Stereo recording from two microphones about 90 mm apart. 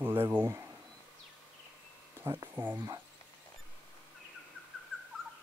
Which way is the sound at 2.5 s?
20° right (ahead or behind).